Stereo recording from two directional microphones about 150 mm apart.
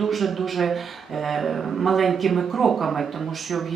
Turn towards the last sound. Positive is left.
turn(degrees=0)  # may be behind; listen again after turning